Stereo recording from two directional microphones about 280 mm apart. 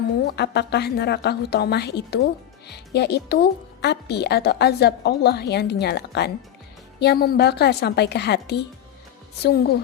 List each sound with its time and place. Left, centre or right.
0.3 s a woman's voice: left